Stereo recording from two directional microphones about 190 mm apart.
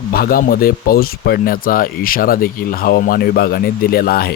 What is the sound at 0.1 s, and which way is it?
Speech, 50° left (ahead or behind).